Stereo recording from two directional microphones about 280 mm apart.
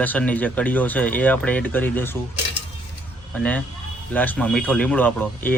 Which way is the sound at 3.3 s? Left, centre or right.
Centre.